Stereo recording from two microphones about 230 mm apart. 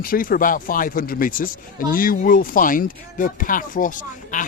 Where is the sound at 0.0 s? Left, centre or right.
Left.